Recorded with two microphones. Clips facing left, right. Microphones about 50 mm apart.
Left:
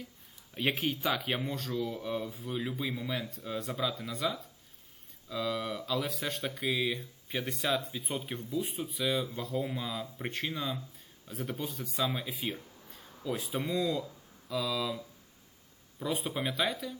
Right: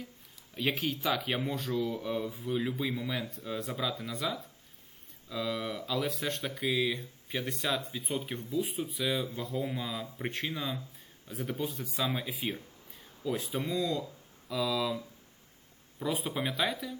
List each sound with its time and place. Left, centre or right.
0.7 s speech: left
1.0 s speech: centre
2.3 s speech: centre
5.6 s speech: centre
5.9 s speech: centre
16.0 s speech: centre